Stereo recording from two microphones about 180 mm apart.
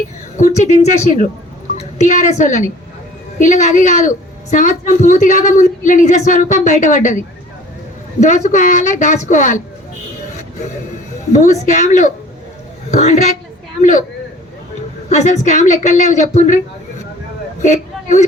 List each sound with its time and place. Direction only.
0.3 s a woman's voice: 40° left (ahead or behind)
8.2 s speech: 40° left (ahead or behind)
11.3 s a woman's voice: 40° left (ahead or behind)
15.1 s a woman's voice: 40° left (ahead or behind)
17.6 s speech: 40° left (ahead or behind)